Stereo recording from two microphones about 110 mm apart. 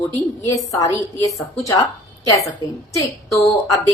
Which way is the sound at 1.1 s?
30° left (ahead or behind).